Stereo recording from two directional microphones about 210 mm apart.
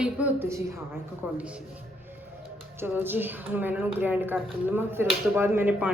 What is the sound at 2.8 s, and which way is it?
A woman's voice, 10° right (ahead or behind).